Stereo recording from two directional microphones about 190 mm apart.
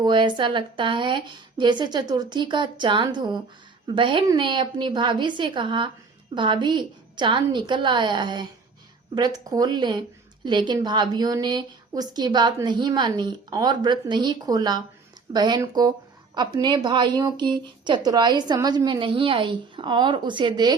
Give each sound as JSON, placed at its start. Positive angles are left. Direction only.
{"t": 0.0, "sound": "a woman's voice", "side_deg": -25}